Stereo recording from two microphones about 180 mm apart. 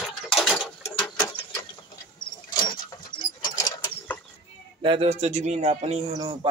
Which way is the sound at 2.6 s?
25° left (ahead or behind).